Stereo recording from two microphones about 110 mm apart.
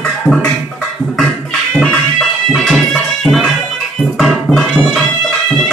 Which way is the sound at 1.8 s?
5° left (ahead or behind).